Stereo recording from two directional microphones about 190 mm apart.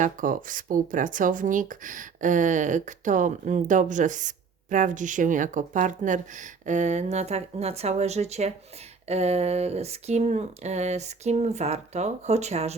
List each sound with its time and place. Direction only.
0.0 s speech: 45° right (ahead or behind)